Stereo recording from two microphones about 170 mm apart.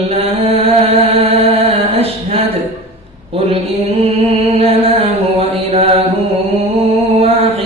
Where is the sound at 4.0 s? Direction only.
35° right (ahead or behind).